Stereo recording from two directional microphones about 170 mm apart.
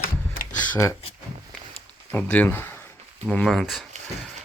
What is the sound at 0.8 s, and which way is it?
Speech, 15° left (ahead or behind).